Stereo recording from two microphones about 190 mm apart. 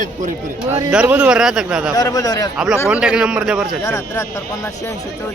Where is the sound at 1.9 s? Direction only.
20° left (ahead or behind).